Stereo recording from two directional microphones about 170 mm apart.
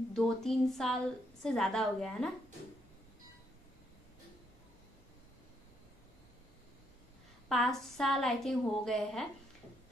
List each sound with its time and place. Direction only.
0.1 s a woman's voice: 5° left (ahead or behind)
7.4 s a woman's voice: centre (ahead or behind)